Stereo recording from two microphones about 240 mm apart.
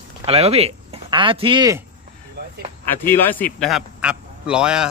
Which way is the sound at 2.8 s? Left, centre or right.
Centre.